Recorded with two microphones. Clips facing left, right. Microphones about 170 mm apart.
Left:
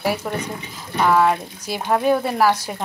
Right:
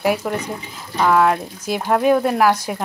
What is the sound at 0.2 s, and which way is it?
Speech, centre (ahead or behind).